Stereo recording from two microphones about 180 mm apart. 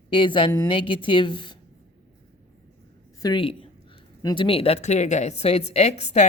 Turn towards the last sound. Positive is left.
turn(degrees=35)  # may be behind; listen again after turning